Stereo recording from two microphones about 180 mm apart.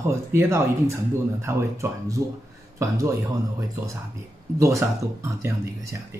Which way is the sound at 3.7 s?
15° right (ahead or behind).